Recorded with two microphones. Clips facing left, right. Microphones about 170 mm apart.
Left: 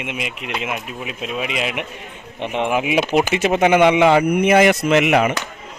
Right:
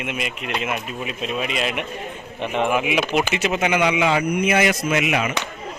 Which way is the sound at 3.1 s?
40° left (ahead or behind).